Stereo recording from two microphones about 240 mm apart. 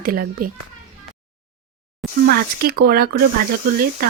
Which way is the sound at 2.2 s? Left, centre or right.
Right.